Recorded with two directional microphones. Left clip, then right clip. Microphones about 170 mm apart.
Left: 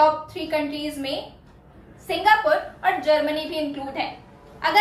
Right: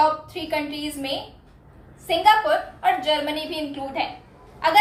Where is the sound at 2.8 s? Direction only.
20° right (ahead or behind).